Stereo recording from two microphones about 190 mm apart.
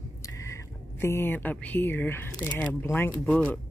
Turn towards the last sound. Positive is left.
turn(degrees=5)  # may be behind; listen again after turning